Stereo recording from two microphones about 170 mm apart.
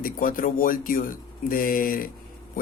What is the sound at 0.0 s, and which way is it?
A man's voice, 55° left (ahead or behind).